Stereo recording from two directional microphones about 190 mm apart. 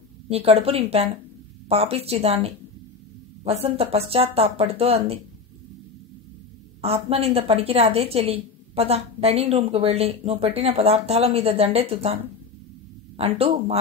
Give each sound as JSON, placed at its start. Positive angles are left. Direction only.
{"t": 0.3, "sound": "a woman's voice", "side_deg": -30}
{"t": 6.8, "sound": "a woman's voice", "side_deg": -30}
{"t": 13.2, "sound": "a woman's voice", "side_deg": -30}